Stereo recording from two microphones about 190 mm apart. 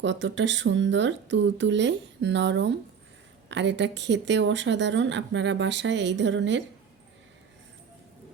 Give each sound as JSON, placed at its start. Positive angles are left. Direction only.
{"t": 0.0, "sound": "speech", "side_deg": -70}